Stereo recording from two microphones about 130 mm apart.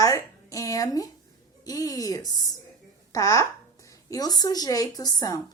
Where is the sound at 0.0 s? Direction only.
25° left (ahead or behind).